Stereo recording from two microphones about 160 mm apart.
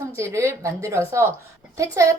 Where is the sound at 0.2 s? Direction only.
20° right (ahead or behind).